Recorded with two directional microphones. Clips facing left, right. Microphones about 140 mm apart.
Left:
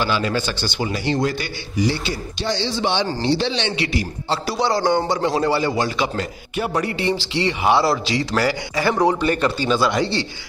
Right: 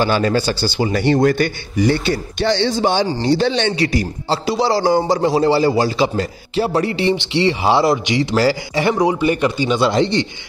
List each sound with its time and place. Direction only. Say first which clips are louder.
0.0 s speech: right 5 dB; 40° right (ahead or behind)
0.9 s a man's voice: right 9 dB; 55° right (ahead or behind)
2.7 s a man's voice: right 4 dB; 45° right (ahead or behind); by 8.9 s 25° right (ahead or behind)
8.9 s speech: right 1 dB; 10° right (ahead or behind)